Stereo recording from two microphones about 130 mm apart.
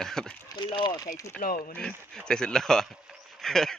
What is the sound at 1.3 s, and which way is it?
Speech, 90° left.